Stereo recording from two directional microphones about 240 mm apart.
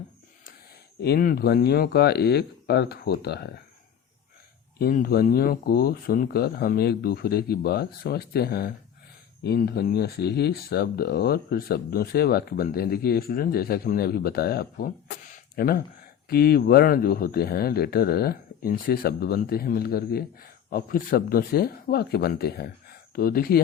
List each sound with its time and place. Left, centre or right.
1.0 s speech: left
4.8 s speech: left